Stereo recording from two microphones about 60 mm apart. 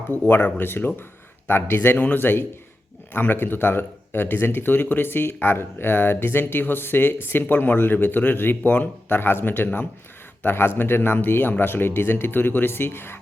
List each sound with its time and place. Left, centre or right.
0.3 s speech: left